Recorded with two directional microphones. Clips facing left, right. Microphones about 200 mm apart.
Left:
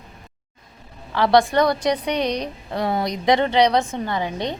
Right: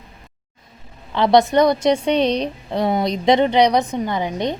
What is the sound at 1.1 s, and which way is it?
A woman's voice, 20° right (ahead or behind).